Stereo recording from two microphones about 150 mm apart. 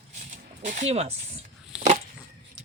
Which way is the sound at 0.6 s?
55° right (ahead or behind).